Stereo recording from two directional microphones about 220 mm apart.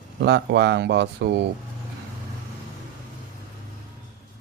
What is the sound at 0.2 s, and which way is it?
Speech, 50° right (ahead or behind).